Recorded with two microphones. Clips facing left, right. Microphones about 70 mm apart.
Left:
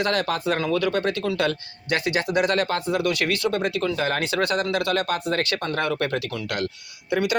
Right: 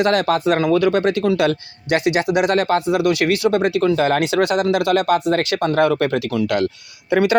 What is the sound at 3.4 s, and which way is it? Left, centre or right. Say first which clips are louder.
Speech: right 9 dB; right.